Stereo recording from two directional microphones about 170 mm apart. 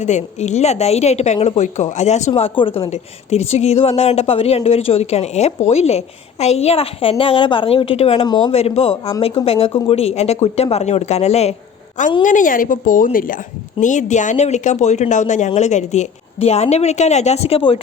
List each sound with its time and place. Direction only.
0.0 s a woman's voice: 45° left (ahead or behind)
12.2 s a woman's voice: 50° left (ahead or behind); by 17.7 s 35° left (ahead or behind)